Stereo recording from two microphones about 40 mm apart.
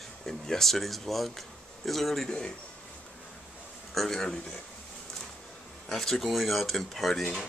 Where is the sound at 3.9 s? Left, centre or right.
Centre.